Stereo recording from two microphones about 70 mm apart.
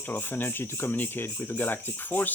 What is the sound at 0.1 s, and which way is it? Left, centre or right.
Speech, left.